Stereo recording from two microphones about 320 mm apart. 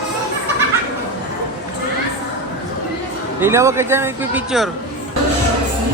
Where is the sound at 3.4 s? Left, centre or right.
Centre.